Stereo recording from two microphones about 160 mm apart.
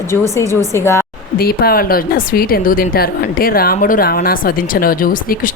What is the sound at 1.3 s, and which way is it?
A woman's voice, 70° left (ahead or behind).